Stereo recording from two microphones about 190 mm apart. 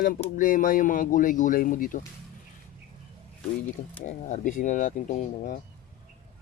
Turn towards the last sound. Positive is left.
turn(degrees=40)  # may be behind; listen again after turning